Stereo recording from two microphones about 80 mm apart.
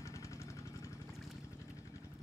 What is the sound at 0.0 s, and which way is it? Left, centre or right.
Vehicle, left.